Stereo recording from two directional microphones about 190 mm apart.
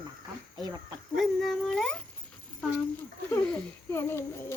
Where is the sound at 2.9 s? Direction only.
10° left (ahead or behind).